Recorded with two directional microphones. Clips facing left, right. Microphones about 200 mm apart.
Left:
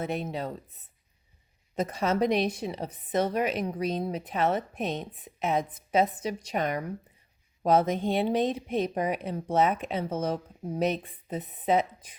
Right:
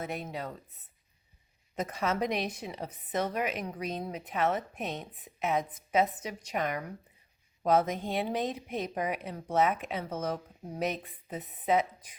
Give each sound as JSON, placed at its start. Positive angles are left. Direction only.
{"t": 0.0, "sound": "a woman's voice", "side_deg": 25}
{"t": 1.7, "sound": "a woman's voice", "side_deg": 30}